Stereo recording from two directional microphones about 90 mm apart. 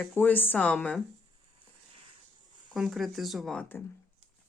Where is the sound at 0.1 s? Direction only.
20° left (ahead or behind).